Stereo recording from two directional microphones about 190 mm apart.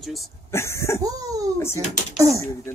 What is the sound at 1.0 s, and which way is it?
Speech, 20° right (ahead or behind).